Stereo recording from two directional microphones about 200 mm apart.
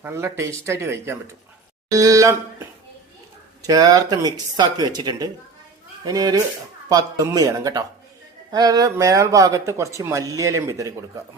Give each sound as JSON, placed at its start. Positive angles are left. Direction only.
{"t": 0.0, "sound": "speech", "side_deg": -15}
{"t": 3.6, "sound": "speech", "side_deg": -20}